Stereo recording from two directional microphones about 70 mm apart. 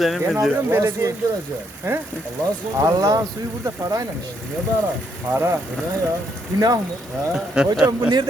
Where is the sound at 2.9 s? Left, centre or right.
Right.